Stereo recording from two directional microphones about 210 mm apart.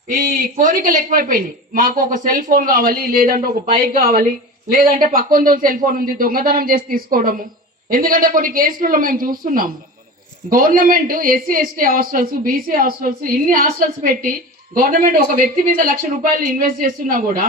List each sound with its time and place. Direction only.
0.3 s speech: 40° right (ahead or behind)